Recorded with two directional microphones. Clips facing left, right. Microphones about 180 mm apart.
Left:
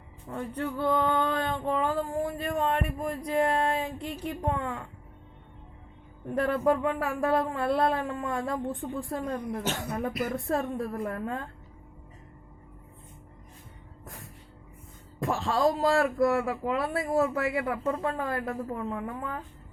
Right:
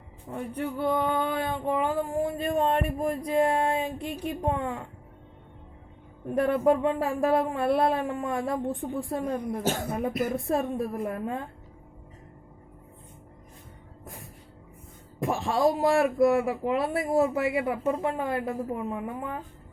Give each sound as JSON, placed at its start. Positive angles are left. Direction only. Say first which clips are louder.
{"t": 0.3, "sound": "a sound", "louder": "right 1 dB", "side_deg": -15}
{"t": 6.2, "sound": "speech", "louder": "right 3 dB", "side_deg": -20}
{"t": 14.0, "sound": "music", "louder": "right 2 dB", "side_deg": -20}
{"t": 15.2, "sound": "speech", "louder": "right 1 dB", "side_deg": -20}